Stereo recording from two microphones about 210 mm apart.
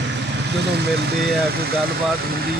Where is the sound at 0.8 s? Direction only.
50° right (ahead or behind).